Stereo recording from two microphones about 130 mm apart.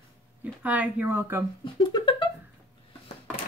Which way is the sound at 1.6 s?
35° left (ahead or behind).